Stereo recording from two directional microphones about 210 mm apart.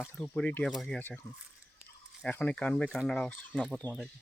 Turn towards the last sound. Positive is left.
turn(degrees=5)  # may be behind; listen again after turning